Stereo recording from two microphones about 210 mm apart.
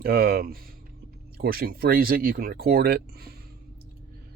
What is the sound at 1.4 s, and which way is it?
Speech, 45° right (ahead or behind).